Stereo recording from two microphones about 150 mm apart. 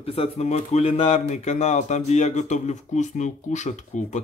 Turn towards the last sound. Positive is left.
turn(degrees=55)  # may be behind; listen again after turning